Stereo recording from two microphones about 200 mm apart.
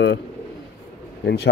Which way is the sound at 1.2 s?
55° left (ahead or behind).